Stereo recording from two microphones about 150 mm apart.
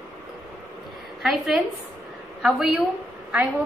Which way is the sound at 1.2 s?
Centre (ahead or behind).